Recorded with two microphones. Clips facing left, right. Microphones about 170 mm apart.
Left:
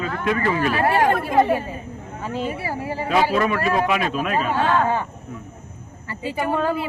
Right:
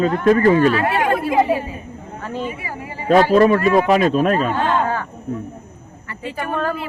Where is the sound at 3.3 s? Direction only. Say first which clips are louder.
Right 7 dB; 40° right (ahead or behind).